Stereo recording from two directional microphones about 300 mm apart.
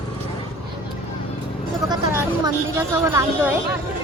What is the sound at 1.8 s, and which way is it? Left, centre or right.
A woman's voice, centre.